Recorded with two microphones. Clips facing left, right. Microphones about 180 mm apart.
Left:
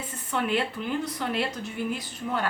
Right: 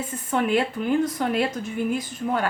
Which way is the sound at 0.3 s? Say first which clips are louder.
Right 5 dB; 45° right (ahead or behind).